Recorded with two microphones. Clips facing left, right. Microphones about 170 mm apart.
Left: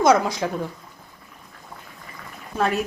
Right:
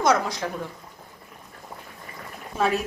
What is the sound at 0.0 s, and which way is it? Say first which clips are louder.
Speech: left 4 dB; 10° left (ahead or behind).